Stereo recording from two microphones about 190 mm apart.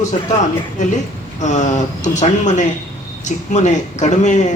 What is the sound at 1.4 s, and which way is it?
A man's voice, 40° left (ahead or behind).